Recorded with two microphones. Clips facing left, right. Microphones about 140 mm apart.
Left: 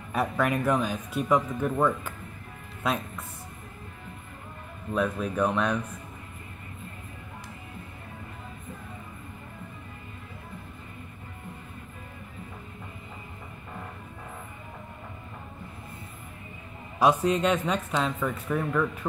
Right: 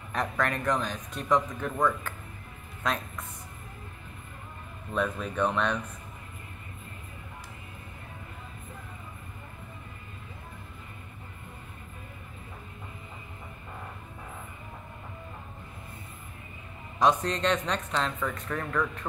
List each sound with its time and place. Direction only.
0.1 s speech: 10° left (ahead or behind)
4.9 s speech: 5° left (ahead or behind)
17.0 s speech: 10° left (ahead or behind)